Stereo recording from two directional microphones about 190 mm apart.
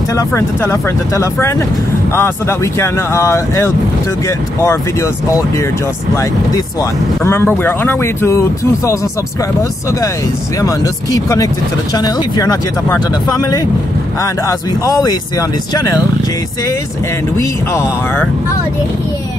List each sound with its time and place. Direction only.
0.1 s speech: 15° left (ahead or behind)
14.2 s speech: 15° left (ahead or behind)
17.4 s speech: 10° left (ahead or behind)